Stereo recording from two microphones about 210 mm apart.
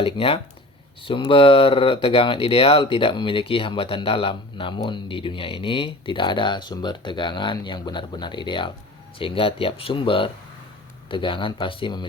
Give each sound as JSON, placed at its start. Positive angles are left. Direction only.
{"t": 0.0, "sound": "speech", "side_deg": 25}